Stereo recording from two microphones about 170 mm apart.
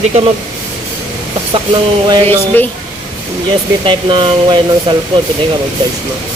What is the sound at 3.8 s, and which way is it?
Speech, 30° right (ahead or behind).